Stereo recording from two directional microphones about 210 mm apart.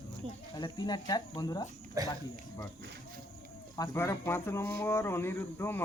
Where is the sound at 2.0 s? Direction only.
15° right (ahead or behind).